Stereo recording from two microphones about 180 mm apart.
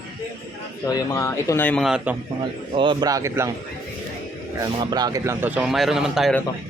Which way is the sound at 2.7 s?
25° right (ahead or behind).